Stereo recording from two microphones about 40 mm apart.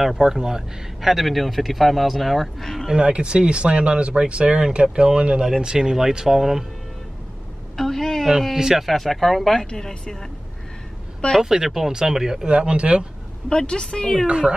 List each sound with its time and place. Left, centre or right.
0.1 s speech: centre
1.0 s speech: centre
3.0 s speech: right; by 6.6 s centre
7.7 s a sound: centre
8.5 s speech: centre
8.8 s speech: centre
9.7 s a woman's voice: centre
11.4 s speech: centre
12.4 s speech: right
13.5 s a woman's voice: centre
14.2 s speech: right